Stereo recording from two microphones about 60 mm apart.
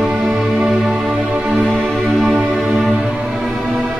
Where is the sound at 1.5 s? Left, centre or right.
Centre.